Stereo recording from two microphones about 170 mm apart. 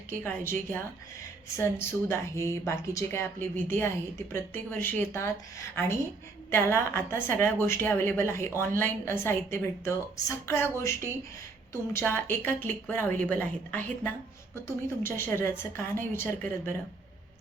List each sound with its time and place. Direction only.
0.1 s a woman's voice: 15° left (ahead or behind)